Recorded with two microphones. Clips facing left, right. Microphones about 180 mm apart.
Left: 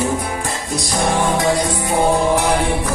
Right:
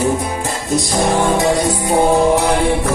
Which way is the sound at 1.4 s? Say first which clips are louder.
Right 2 dB; 25° right (ahead or behind).